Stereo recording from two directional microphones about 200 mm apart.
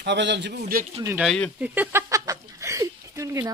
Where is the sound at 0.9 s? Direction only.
15° right (ahead or behind).